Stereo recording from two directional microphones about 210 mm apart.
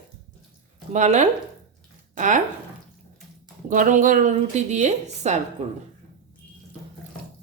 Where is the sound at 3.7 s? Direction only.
40° right (ahead or behind).